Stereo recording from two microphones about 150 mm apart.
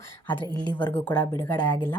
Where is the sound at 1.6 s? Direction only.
30° left (ahead or behind).